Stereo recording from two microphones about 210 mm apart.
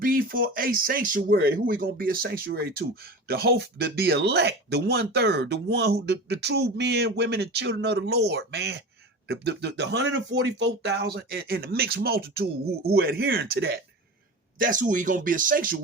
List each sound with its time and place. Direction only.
0.0 s speech: 40° right (ahead or behind)
14.6 s speech: 40° right (ahead or behind)